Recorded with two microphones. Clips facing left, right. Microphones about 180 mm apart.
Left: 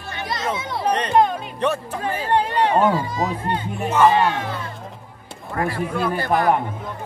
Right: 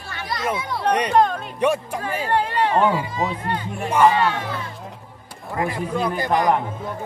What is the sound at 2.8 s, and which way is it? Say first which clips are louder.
Speech: left 1 dB; 40° left (ahead or behind).